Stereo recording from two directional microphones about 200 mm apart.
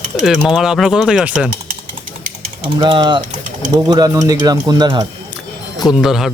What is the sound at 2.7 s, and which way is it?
Speech, 25° right (ahead or behind).